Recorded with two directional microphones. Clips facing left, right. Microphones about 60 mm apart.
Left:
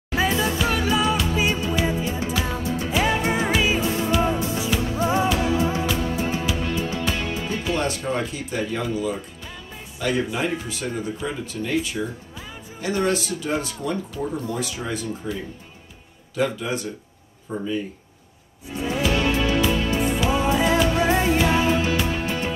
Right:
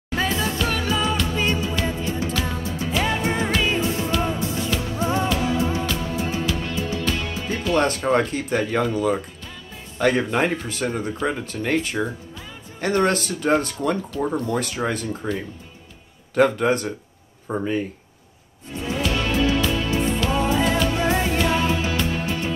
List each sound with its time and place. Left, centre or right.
0.1 s music: centre
7.7 s speech: right
16.3 s speech: right
18.8 s music: centre